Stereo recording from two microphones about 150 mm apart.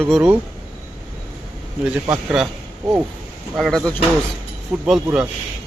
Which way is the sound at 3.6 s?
5° left (ahead or behind).